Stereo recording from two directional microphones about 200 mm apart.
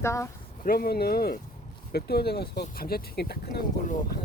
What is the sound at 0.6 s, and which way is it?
Speech, 45° left (ahead or behind).